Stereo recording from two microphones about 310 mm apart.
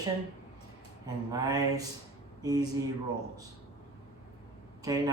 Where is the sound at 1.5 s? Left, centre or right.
Centre.